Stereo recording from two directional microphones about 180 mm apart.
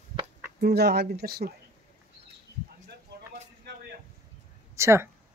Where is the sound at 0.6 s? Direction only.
65° right (ahead or behind).